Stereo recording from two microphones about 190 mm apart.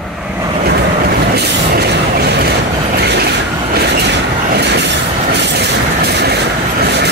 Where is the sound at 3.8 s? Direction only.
60° right (ahead or behind).